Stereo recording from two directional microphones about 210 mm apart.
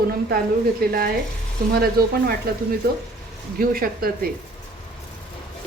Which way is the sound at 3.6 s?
45° right (ahead or behind).